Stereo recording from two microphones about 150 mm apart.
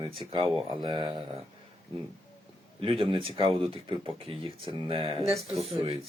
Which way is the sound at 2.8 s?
35° right (ahead or behind).